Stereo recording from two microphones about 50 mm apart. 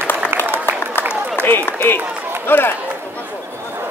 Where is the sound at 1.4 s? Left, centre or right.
Left.